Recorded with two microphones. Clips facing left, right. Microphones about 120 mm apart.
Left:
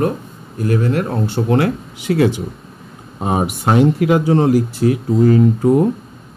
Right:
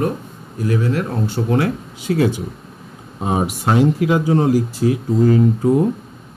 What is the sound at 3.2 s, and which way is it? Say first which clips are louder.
Speech: left 1 dB; 60° left (ahead or behind).